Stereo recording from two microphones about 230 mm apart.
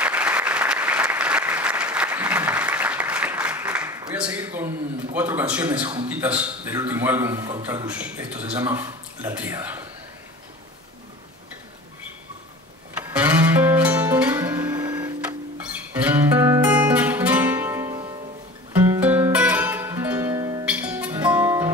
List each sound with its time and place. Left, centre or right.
0.0 s applause: centre
4.1 s a man's voice: centre
5.8 s a man's voice: right
6.0 s a man's voice: centre
12.9 s music: centre
20.6 s music: centre